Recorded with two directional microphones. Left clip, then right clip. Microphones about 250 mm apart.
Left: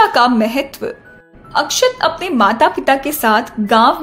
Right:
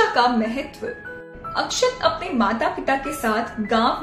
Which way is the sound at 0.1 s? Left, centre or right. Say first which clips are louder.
Left 7 dB; left.